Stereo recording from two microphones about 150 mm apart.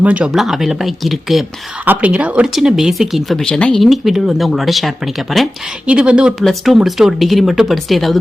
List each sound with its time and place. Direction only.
0.0 s speech: 10° right (ahead or behind)